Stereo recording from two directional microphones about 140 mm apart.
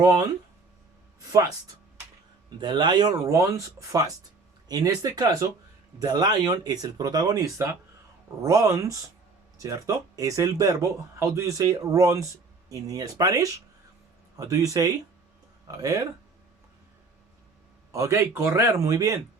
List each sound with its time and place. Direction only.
0.0 s speech: 25° right (ahead or behind)
2.6 s speech: 30° right (ahead or behind)
17.9 s speech: 20° right (ahead or behind)